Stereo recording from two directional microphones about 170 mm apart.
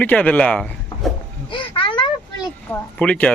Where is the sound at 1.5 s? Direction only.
30° left (ahead or behind).